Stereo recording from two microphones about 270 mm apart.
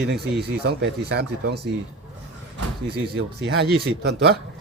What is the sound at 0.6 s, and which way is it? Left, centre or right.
Speech, right.